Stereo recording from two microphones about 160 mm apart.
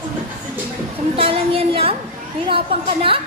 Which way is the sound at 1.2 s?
35° right (ahead or behind).